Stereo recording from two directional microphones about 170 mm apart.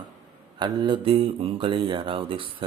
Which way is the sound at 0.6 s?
25° right (ahead or behind).